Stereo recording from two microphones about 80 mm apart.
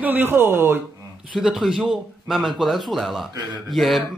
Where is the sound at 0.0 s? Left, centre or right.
Right.